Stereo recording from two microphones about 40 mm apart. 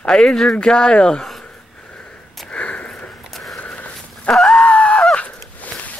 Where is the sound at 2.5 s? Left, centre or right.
Left.